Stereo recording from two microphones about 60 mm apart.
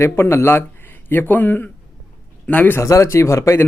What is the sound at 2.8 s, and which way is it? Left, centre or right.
Speech, left.